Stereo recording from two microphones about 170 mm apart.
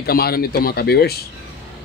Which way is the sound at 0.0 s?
65° left (ahead or behind).